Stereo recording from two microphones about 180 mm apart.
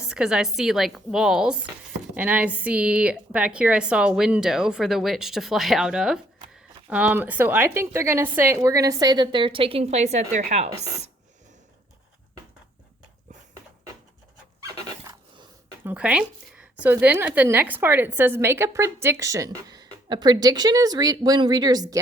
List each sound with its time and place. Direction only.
0.1 s a woman's voice: 5° right (ahead or behind); by 10.8 s 40° right (ahead or behind)
15.8 s speech: 10° right (ahead or behind)